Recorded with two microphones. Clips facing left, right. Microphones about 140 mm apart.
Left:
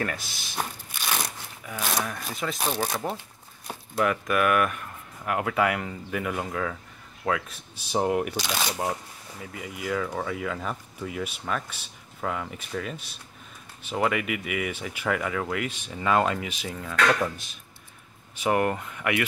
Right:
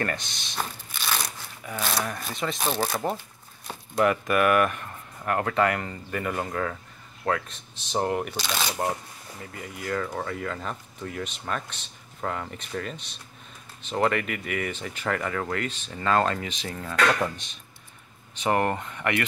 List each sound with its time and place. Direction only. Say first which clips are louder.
0.0 s shuffling cards: right 1 dB; 5° left (ahead or behind)
1.7 s speech: right 1 dB; 10° left (ahead or behind)
3.6 s speech: right 2 dB; centre (ahead or behind)